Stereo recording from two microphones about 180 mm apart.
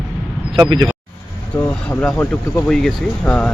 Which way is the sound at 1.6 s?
5° left (ahead or behind).